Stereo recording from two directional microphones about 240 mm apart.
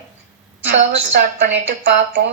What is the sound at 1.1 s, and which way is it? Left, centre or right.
A woman's voice, right.